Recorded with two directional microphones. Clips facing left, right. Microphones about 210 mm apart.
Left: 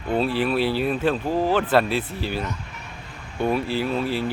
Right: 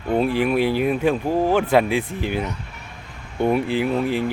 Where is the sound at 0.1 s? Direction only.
15° right (ahead or behind).